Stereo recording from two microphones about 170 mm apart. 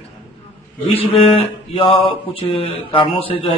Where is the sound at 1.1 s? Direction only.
30° left (ahead or behind).